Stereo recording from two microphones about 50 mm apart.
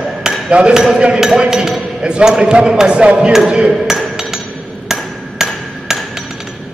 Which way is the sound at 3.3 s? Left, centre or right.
Centre.